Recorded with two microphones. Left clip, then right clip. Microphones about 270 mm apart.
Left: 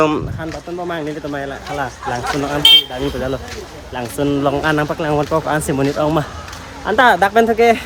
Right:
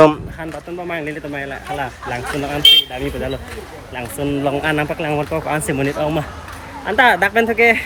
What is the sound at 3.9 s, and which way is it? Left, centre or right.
Speech, centre.